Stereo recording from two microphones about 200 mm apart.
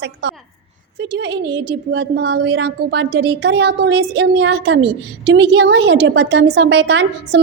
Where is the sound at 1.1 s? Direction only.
60° right (ahead or behind).